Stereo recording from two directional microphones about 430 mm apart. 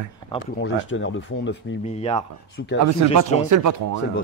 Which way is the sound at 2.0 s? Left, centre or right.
Centre.